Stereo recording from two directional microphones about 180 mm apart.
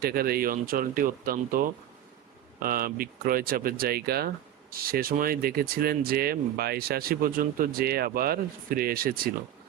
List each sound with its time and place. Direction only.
0.0 s speech: 55° right (ahead or behind)